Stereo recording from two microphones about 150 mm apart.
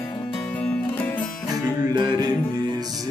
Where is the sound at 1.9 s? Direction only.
25° right (ahead or behind).